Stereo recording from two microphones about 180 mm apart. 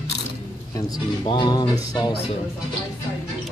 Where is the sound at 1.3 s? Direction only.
25° left (ahead or behind).